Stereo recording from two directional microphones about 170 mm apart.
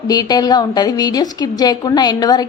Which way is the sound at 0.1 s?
25° left (ahead or behind).